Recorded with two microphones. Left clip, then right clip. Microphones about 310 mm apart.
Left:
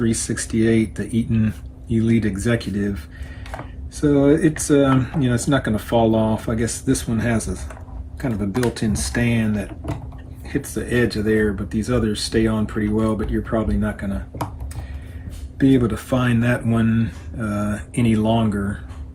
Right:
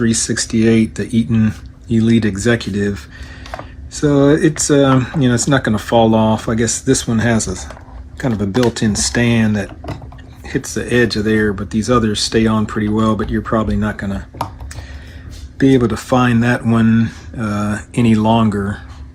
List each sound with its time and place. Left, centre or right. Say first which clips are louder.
0.0 s speech: right 6 dB; centre
4.0 s speech: right 4 dB; right
15.5 s speech: right 5 dB; centre